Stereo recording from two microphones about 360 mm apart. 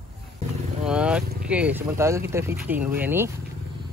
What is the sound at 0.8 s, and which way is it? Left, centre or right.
Vehicle, centre.